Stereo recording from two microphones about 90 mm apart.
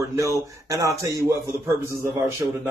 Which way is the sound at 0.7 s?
35° right (ahead or behind).